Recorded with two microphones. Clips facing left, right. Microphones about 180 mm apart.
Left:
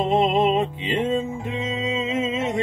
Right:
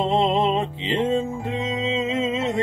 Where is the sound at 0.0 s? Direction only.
15° left (ahead or behind).